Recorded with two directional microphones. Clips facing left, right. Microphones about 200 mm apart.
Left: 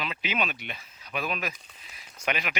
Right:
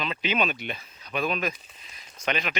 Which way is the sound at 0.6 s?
30° right (ahead or behind).